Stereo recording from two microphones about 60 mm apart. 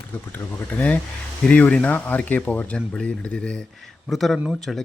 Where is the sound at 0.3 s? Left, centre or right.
Left; by 3.7 s centre.